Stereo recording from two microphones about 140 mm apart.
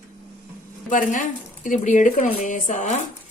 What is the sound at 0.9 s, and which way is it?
A woman's voice, 70° left (ahead or behind).